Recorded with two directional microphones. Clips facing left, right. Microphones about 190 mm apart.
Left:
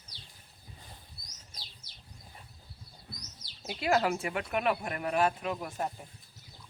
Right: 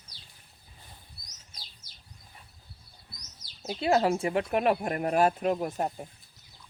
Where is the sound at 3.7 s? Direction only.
25° right (ahead or behind).